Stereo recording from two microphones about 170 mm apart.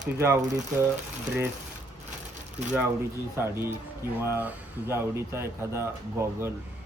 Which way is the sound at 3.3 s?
15° right (ahead or behind).